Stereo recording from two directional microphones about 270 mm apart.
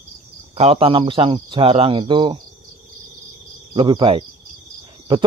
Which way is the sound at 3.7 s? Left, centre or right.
Centre.